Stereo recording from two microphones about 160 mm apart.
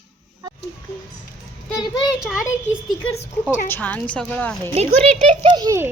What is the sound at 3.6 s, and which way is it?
Speech, 10° left (ahead or behind).